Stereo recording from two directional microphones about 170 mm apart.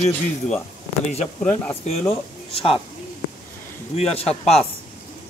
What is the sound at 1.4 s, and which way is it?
Speech, 5° left (ahead or behind).